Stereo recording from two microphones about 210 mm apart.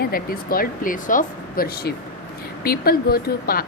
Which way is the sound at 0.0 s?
45° left (ahead or behind).